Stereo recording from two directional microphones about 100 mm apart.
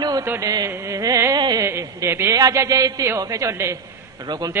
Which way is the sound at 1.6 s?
30° right (ahead or behind).